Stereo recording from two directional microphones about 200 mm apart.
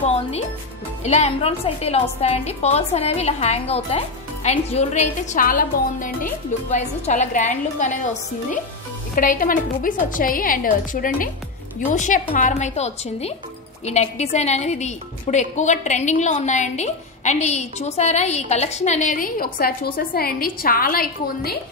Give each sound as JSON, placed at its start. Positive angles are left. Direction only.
{"t": 0.0, "sound": "a woman's voice", "side_deg": 30}